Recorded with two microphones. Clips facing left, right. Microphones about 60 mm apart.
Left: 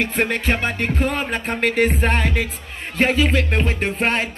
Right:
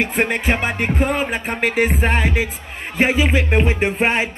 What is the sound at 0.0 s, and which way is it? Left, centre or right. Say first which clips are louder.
Music: right 2 dB; centre.